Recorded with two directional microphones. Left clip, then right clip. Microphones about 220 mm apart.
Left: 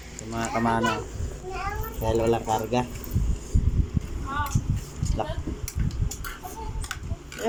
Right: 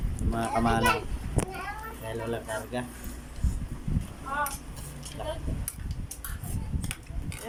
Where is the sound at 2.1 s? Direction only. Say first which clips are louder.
Left 10 dB; 35° left (ahead or behind).